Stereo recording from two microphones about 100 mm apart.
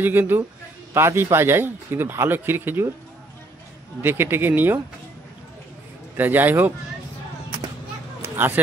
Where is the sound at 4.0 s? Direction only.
25° right (ahead or behind).